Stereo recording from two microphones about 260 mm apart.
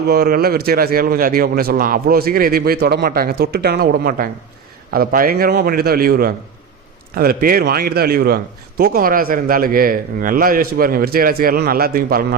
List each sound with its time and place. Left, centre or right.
0.1 s a man's voice: right